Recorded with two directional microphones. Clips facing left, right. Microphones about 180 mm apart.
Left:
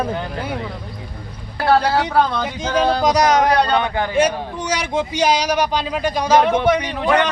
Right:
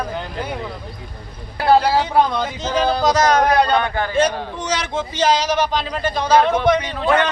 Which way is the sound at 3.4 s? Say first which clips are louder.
Even; 10° right (ahead or behind).